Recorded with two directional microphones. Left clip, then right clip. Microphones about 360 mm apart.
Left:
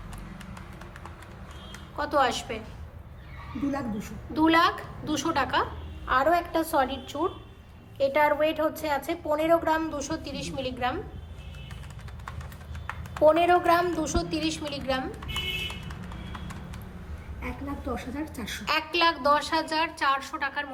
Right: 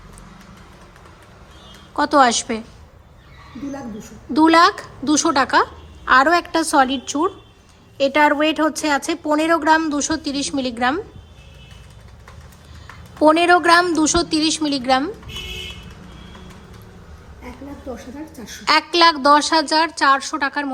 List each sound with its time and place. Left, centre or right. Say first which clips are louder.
2.0 s a woman's voice: right 10 dB; centre
4.4 s a woman's voice: right 9 dB; centre
13.2 s a woman's voice: right 7 dB; right
18.6 s a woman's voice: right 11 dB; centre